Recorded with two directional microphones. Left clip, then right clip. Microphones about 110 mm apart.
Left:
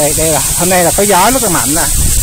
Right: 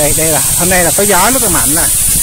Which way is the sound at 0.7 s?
25° left (ahead or behind).